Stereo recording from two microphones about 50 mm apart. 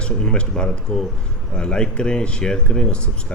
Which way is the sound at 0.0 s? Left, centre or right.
Centre.